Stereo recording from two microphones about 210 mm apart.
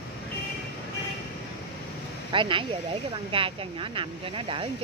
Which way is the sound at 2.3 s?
25° right (ahead or behind).